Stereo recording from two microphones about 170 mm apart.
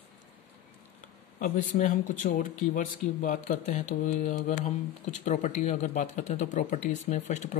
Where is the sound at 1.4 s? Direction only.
45° left (ahead or behind).